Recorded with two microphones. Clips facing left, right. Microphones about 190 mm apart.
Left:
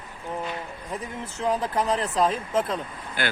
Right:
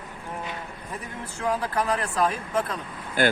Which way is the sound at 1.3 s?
20° left (ahead or behind).